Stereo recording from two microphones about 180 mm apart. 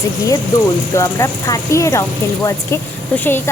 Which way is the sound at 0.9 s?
15° left (ahead or behind).